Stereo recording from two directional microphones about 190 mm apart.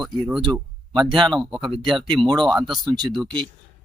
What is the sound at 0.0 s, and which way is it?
Speech, centre (ahead or behind).